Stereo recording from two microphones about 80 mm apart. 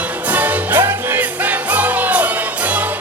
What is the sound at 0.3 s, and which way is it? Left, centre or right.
Music, centre.